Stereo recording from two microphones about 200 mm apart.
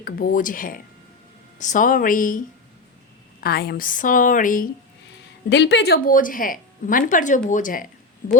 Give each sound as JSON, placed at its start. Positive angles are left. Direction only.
{"t": 0.0, "sound": "speech", "side_deg": 45}
{"t": 3.4, "sound": "speech", "side_deg": 55}
{"t": 5.5, "sound": "speech", "side_deg": 60}